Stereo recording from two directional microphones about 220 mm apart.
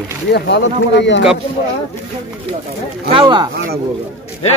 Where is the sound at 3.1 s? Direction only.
20° right (ahead or behind).